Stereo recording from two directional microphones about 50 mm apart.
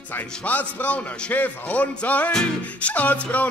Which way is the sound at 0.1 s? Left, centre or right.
Left.